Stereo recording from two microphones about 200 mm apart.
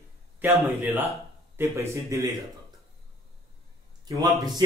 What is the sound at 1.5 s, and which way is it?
Speech, 15° right (ahead or behind).